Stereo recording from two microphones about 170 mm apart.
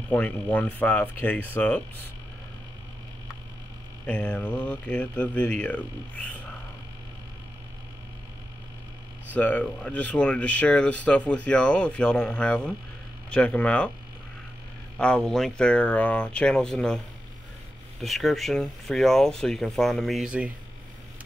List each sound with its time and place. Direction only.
0.1 s speech: 10° left (ahead or behind)
4.0 s speech: 10° left (ahead or behind)
9.3 s speech: 10° left (ahead or behind)
15.0 s speech: 5° left (ahead or behind)
18.0 s speech: centre (ahead or behind)